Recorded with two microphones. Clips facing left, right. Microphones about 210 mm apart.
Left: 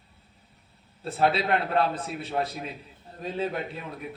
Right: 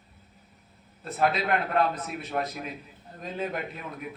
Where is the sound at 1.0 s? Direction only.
30° left (ahead or behind).